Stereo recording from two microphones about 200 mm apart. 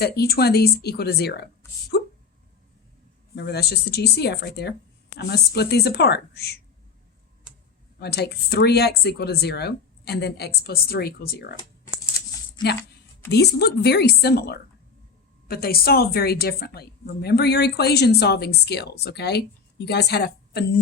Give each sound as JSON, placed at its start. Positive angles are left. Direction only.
{"t": 0.0, "sound": "a woman's voice", "side_deg": 50}
{"t": 1.9, "sound": "a sound", "side_deg": 50}
{"t": 3.3, "sound": "a woman's voice", "side_deg": 55}
{"t": 7.9, "sound": "a woman's voice", "side_deg": 55}
{"t": 12.6, "sound": "speech", "side_deg": 20}
{"t": 13.3, "sound": "a woman's voice", "side_deg": 55}